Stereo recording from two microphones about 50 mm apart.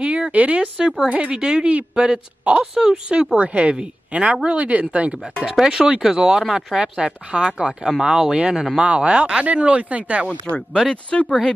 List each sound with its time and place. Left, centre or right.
0.0 s speech: right
1.3 s speech: centre
1.7 s speech: right
2.6 s speech: centre
3.3 s speech: right
5.4 s speech: centre; by 10.2 s right
10.2 s speech: left